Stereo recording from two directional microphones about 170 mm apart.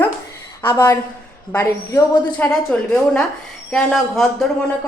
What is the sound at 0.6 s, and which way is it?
A woman's voice, 15° left (ahead or behind).